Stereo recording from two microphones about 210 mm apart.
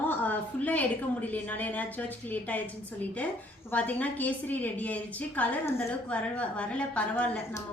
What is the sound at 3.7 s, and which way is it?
A woman's voice, 5° left (ahead or behind).